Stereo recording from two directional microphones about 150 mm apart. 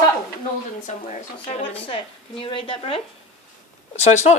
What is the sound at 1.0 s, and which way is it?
Speech, 45° left (ahead or behind).